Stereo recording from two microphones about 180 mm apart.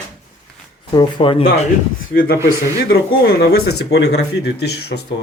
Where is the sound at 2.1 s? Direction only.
50° left (ahead or behind).